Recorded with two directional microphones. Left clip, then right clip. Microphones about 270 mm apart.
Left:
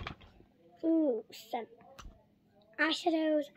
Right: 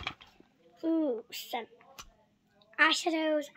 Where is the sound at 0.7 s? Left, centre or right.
Centre.